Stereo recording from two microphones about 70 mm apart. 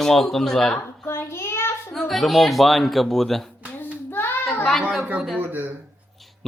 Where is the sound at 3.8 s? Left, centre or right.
Left.